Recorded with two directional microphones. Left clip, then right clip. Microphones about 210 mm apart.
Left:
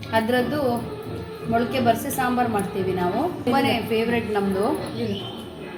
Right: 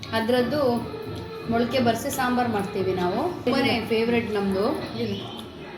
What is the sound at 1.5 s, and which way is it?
Speech, centre (ahead or behind).